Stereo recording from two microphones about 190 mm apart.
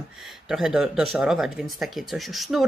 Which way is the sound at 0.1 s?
Centre (ahead or behind).